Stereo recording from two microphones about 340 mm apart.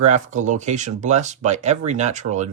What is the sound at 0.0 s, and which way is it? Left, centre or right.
Speech, right.